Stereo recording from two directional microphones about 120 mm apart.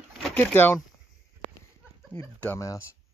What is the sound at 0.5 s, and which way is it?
Speech, 15° left (ahead or behind).